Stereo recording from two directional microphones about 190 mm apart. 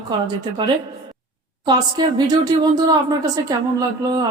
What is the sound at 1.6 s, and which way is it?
A woman's voice, 20° right (ahead or behind).